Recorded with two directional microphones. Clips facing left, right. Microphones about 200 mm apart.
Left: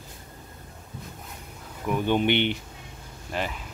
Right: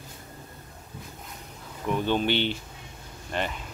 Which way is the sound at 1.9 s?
15° left (ahead or behind).